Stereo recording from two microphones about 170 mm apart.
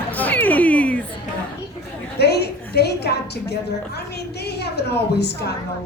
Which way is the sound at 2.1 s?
75° left (ahead or behind).